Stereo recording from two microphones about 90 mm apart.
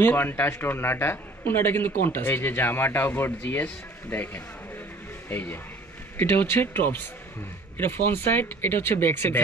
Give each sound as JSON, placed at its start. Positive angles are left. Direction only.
{"t": 0.0, "sound": "a man's voice", "side_deg": 25}